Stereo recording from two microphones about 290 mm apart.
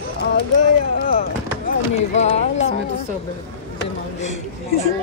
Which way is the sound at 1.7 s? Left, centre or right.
Left.